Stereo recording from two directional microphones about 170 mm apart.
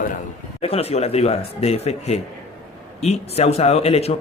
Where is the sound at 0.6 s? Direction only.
35° left (ahead or behind).